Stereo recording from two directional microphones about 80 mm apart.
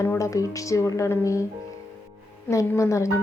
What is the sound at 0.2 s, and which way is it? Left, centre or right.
Speech, left.